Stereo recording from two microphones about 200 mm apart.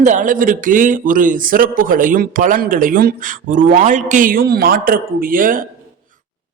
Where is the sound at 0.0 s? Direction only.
40° right (ahead or behind).